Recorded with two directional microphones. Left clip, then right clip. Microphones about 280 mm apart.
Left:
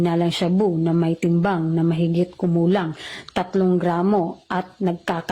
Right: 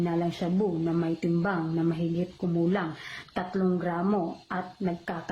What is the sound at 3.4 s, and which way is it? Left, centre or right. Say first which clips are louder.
Speech: left 9 dB; left.